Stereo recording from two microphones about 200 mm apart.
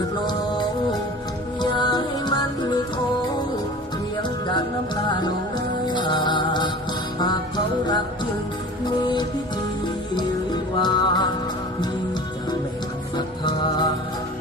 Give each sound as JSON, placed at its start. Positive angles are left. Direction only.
{"t": 1.7, "sound": "music", "side_deg": 20}
{"t": 5.9, "sound": "music", "side_deg": 20}
{"t": 10.8, "sound": "music", "side_deg": 20}
{"t": 13.1, "sound": "music", "side_deg": 20}